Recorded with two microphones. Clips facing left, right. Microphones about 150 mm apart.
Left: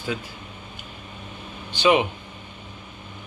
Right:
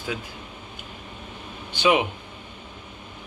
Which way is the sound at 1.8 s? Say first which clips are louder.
Left 2 dB; 5° right (ahead or behind).